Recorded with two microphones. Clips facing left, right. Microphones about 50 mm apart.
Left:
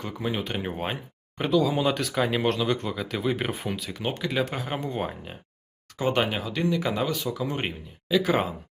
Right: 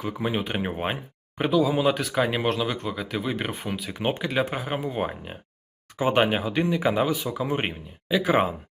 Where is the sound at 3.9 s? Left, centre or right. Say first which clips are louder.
Right 3 dB; right.